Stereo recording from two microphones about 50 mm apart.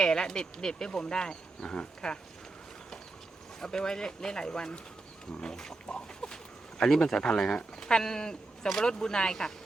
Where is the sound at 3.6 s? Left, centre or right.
Centre.